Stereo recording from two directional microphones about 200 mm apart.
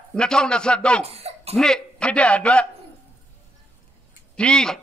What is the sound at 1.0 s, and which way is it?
Speech, 30° right (ahead or behind).